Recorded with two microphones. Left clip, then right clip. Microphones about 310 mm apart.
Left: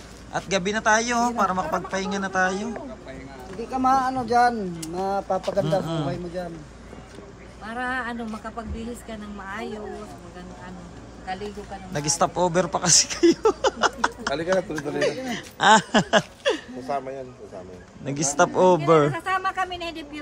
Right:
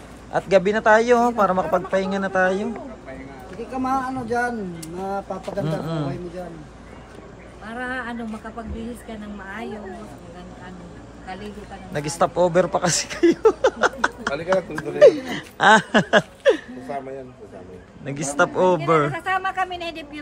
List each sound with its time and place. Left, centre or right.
0.3 s a man's voice: centre
3.7 s speech: left
5.7 s a man's voice: centre
7.6 s speech: centre
9.5 s speech: centre
11.9 s a man's voice: centre
18.0 s a man's voice: centre